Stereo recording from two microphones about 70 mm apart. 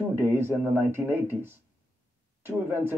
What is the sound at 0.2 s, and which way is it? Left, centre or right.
A man's voice, right.